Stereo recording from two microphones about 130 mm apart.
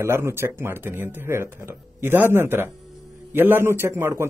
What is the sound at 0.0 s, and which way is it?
A man's voice, 20° right (ahead or behind).